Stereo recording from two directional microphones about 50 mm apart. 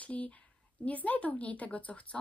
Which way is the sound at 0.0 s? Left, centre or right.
Left.